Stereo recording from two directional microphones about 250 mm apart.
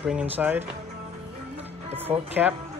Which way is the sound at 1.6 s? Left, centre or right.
Centre.